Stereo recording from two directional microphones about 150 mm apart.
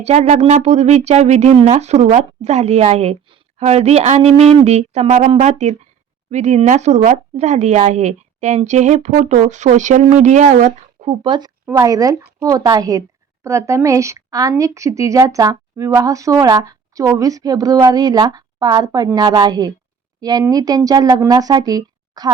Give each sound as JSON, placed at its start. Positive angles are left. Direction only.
{"t": 0.0, "sound": "a woman's voice", "side_deg": -45}